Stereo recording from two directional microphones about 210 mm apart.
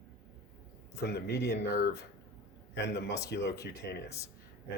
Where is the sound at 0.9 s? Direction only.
50° left (ahead or behind).